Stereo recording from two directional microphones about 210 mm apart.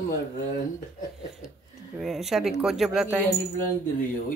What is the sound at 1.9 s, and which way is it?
Speech, centre (ahead or behind).